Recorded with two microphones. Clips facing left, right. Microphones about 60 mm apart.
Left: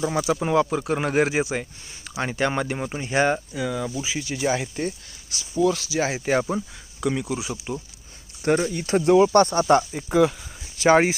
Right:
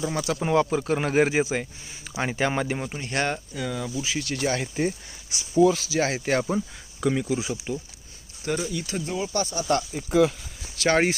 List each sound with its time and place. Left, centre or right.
0.0 s speech: centre
2.9 s speech: centre
4.8 s speech: right
5.6 s speech: centre
8.4 s speech: left
9.1 s speech: left
9.9 s speech: centre